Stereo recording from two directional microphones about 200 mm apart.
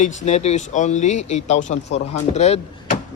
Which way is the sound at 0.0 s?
35° left (ahead or behind).